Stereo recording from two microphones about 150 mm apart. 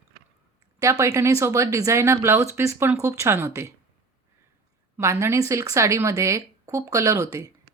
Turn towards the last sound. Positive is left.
turn(degrees=-20)  # may be behind; listen again after turning